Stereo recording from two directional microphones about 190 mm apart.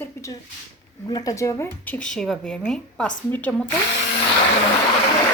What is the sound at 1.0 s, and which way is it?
Speech, 20° left (ahead or behind).